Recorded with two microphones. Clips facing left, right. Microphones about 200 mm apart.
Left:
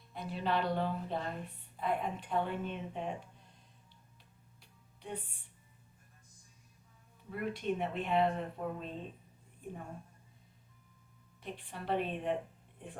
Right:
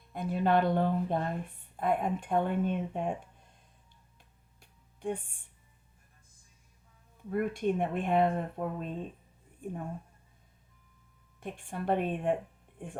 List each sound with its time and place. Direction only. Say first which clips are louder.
0.1 s speech: right 7 dB; 50° right (ahead or behind)
4.6 s music: right 13 dB; 50° right (ahead or behind)
7.3 s speech: right 6 dB; 50° right (ahead or behind)
11.3 s speech: right 6 dB; 50° right (ahead or behind)